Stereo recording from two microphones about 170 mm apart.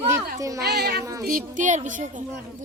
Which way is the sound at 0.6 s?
70° right (ahead or behind).